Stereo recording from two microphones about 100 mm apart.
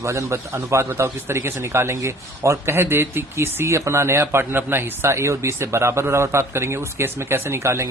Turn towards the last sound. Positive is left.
turn(degrees=-30)  # may be behind; listen again after turning